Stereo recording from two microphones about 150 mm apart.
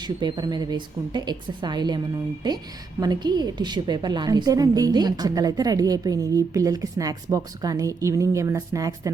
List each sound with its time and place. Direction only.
0.0 s a woman's voice: 30° right (ahead or behind)
3.0 s a woman's voice: 25° right (ahead or behind)